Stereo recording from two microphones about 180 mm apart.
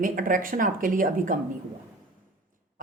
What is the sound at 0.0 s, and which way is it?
Speech, 50° right (ahead or behind).